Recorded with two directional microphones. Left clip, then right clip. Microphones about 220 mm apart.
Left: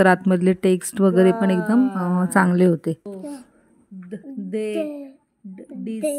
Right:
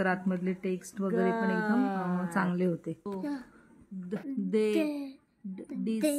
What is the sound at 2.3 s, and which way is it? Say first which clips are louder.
Speech: left 14 dB; 40° left (ahead or behind).